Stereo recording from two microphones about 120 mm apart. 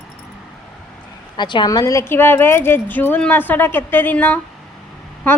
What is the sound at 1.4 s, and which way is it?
A woman's voice, 40° left (ahead or behind).